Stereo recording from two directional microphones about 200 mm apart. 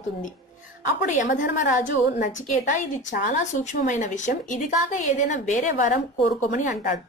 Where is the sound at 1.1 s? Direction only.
40° left (ahead or behind).